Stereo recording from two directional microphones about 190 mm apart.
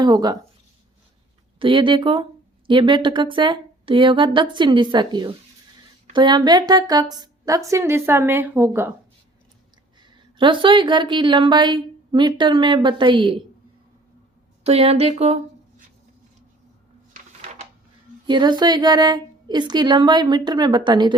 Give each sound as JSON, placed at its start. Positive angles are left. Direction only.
{"t": 0.0, "sound": "speech", "side_deg": -20}
{"t": 1.5, "sound": "a woman's voice", "side_deg": -25}
{"t": 10.0, "sound": "speech", "side_deg": -25}
{"t": 14.6, "sound": "a sound", "side_deg": -35}
{"t": 18.3, "sound": "speech", "side_deg": -25}